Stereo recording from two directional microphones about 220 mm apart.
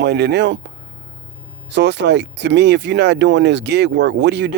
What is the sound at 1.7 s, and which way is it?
Speech, 50° right (ahead or behind).